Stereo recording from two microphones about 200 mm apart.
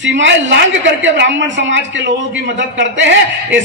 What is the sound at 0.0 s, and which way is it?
A man's voice, 65° right (ahead or behind).